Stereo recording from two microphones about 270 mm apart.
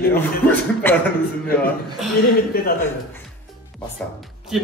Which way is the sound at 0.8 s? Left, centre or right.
Centre.